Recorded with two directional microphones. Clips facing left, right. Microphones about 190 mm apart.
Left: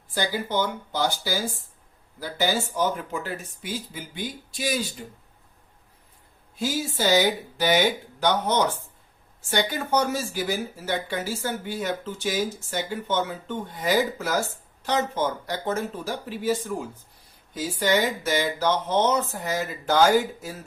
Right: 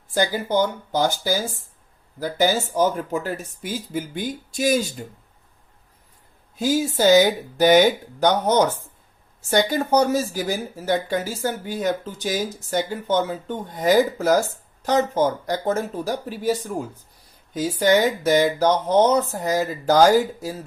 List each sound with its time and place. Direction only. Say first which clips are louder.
0.1 s speech: right 5 dB; 45° right (ahead or behind)
6.6 s speech: right 7 dB; 45° right (ahead or behind)
17.7 s speech: right 5 dB; 45° right (ahead or behind)